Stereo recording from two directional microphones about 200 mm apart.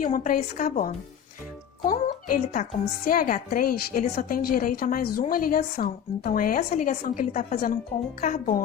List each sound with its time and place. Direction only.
0.0 s a woman's voice: 40° left (ahead or behind)